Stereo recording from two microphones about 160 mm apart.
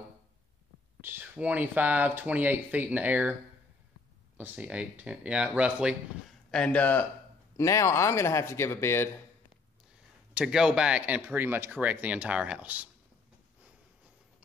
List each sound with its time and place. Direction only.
1.0 s speech: 15° right (ahead or behind)
4.4 s speech: 10° right (ahead or behind)
6.5 s a man's voice: 5° left (ahead or behind)
10.3 s speech: 5° right (ahead or behind)